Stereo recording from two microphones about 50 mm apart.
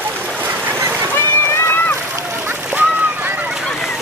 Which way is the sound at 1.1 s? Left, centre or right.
Left.